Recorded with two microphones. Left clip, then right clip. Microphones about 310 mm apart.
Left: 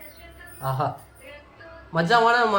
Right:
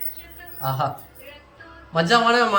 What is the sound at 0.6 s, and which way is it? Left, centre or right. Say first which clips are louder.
Speech: right 2 dB; left.